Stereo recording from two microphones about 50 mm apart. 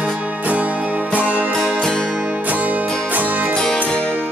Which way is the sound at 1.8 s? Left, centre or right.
Centre.